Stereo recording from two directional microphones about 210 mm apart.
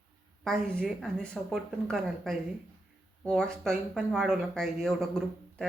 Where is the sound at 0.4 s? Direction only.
5° left (ahead or behind).